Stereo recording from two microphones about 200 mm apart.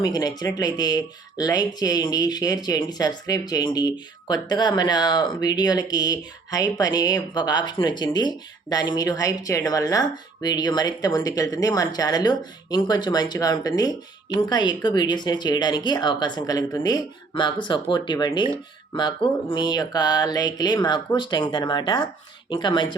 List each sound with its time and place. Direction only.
0.0 s speech: 20° left (ahead or behind)